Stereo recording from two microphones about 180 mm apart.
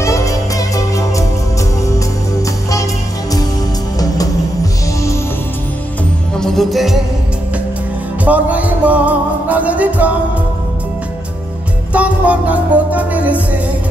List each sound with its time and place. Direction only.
0.0 s music: 15° left (ahead or behind)
6.3 s music: 5° left (ahead or behind)
8.3 s music: 10° right (ahead or behind)
11.9 s music: 5° right (ahead or behind)